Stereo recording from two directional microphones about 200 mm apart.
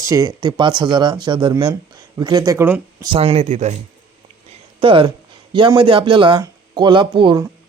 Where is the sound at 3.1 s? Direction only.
30° right (ahead or behind).